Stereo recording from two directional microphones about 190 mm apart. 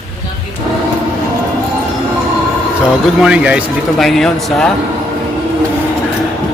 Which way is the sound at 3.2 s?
5° right (ahead or behind).